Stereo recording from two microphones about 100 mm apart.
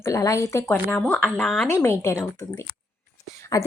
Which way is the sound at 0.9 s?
10° left (ahead or behind).